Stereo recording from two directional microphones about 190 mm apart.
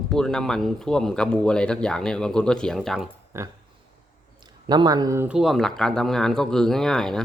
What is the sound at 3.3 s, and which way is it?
Speech, 15° right (ahead or behind).